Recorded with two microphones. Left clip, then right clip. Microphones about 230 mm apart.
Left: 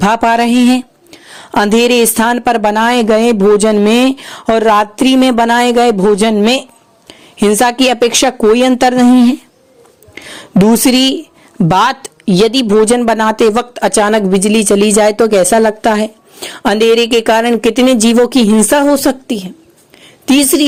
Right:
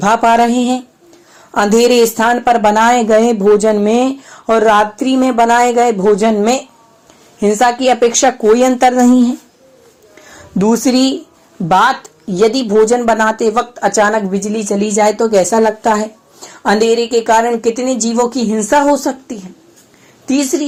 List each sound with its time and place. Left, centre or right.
0.0 s speech: left
17.9 s speech: left
20.3 s speech: left